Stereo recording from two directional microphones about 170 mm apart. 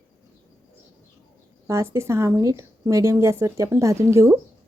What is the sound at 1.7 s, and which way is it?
A woman's voice, 15° right (ahead or behind).